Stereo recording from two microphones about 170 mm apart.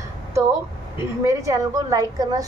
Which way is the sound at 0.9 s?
15° right (ahead or behind).